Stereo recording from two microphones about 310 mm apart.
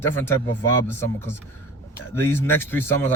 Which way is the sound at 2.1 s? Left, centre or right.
Centre.